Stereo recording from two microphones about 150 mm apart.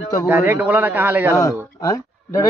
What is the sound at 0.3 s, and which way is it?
Speech, 15° right (ahead or behind).